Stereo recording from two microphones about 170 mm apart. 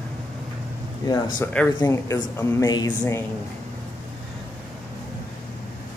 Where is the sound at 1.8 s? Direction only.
20° left (ahead or behind).